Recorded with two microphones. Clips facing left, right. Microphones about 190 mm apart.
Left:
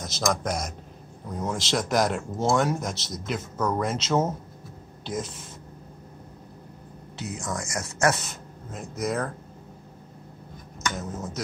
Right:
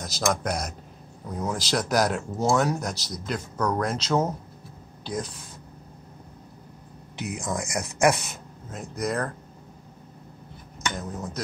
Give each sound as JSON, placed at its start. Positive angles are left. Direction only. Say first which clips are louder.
{"t": 0.0, "sound": "speech", "louder": "even", "side_deg": 0}
{"t": 7.2, "sound": "speech", "louder": "right 2 dB", "side_deg": -15}
{"t": 8.7, "sound": "speech", "louder": "even", "side_deg": 0}
{"t": 11.0, "sound": "speech", "louder": "even", "side_deg": 0}